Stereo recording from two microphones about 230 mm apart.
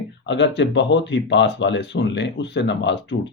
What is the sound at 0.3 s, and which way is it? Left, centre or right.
Speech, left.